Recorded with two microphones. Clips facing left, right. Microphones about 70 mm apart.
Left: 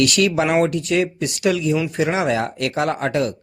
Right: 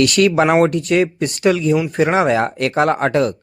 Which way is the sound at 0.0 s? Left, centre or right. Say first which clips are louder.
Right 4 dB; right.